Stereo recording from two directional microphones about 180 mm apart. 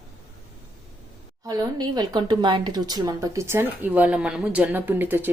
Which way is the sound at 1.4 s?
20° right (ahead or behind).